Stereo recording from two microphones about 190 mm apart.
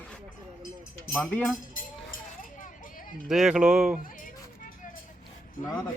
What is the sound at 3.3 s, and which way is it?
Speech, 5° right (ahead or behind).